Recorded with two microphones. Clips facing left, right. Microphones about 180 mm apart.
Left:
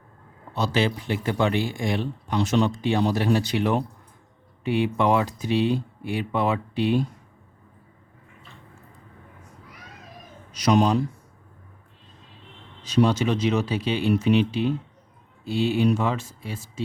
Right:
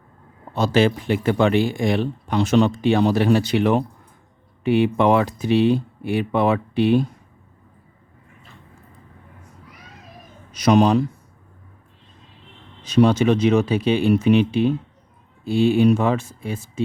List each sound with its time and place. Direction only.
0.5 s speech: 50° right (ahead or behind)
10.5 s speech: 55° right (ahead or behind)
12.8 s speech: 55° right (ahead or behind)